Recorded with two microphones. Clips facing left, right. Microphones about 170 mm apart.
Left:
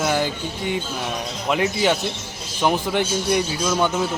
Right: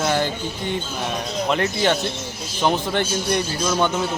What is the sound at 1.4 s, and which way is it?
A man's voice, 10° left (ahead or behind).